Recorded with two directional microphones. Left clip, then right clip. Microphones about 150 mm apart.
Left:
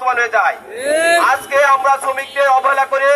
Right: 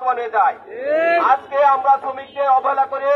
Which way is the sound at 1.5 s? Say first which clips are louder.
Left 3 dB; 25° left (ahead or behind).